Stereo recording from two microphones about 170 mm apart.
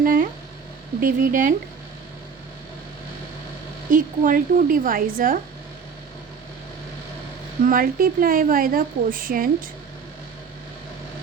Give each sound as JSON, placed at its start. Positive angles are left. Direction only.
{"t": 0.0, "sound": "a sound", "side_deg": -55}
{"t": 1.0, "sound": "speech", "side_deg": -50}
{"t": 3.8, "sound": "speech", "side_deg": -50}
{"t": 7.6, "sound": "speech", "side_deg": -55}